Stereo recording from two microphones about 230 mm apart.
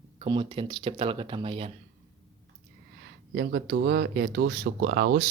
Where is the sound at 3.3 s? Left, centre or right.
Right.